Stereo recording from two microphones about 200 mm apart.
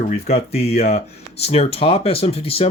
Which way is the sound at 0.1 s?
30° left (ahead or behind).